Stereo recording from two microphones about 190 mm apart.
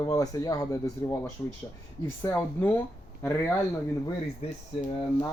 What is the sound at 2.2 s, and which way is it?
Speech, 10° left (ahead or behind).